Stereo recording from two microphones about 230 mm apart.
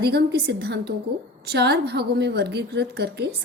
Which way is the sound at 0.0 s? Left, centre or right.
Right.